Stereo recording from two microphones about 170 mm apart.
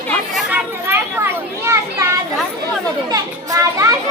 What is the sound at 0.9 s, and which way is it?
Children playing, 15° right (ahead or behind).